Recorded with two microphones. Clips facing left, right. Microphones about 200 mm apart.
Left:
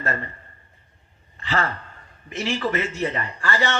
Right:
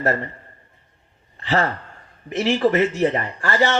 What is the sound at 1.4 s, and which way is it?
Sigh, 30° right (ahead or behind).